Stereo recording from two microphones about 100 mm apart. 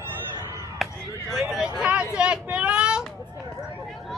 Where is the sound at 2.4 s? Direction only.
10° right (ahead or behind).